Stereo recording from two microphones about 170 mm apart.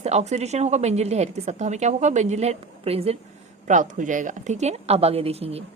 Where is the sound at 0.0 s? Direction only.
40° right (ahead or behind).